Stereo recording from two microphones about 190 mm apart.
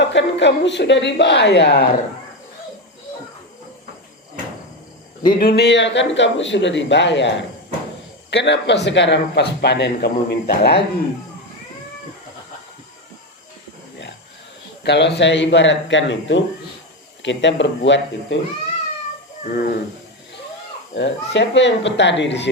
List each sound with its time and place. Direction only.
0.0 s speech: 70° left (ahead or behind)
5.4 s speech: 55° left (ahead or behind)
14.8 s speech: 65° left (ahead or behind)
19.5 s speech: 55° left (ahead or behind)
20.9 s speech: 70° left (ahead or behind)